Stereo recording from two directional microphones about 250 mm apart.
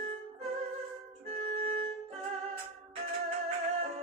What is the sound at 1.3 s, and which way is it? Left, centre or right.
Music, right.